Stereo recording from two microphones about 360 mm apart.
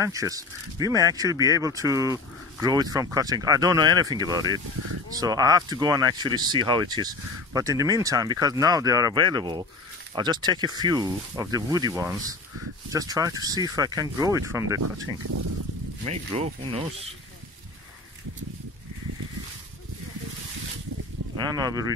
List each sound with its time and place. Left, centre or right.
0.0 s speech: centre
16.1 s speech: centre
21.4 s speech: centre